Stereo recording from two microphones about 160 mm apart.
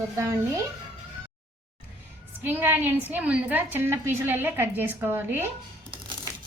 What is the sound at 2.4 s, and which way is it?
A woman's voice, 10° right (ahead or behind).